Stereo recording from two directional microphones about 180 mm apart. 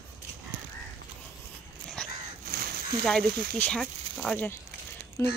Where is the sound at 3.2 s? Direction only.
60° right (ahead or behind).